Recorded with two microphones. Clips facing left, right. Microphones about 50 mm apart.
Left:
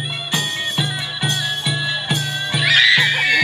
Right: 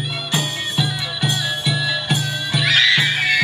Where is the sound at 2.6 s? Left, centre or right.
Centre.